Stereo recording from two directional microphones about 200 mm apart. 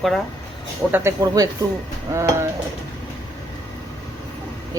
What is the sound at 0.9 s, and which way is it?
Speech, 10° right (ahead or behind).